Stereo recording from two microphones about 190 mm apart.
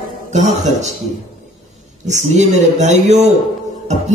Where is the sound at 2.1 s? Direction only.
40° right (ahead or behind).